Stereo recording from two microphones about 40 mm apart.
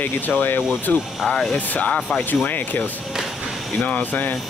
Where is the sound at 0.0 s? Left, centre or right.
Left.